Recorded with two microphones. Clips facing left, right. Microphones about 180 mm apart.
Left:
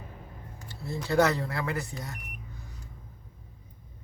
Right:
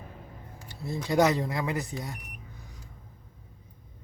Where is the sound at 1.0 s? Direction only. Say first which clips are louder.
Right 1 dB; 15° right (ahead or behind).